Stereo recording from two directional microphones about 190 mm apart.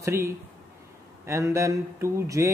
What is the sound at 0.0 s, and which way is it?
Speech, 15° right (ahead or behind).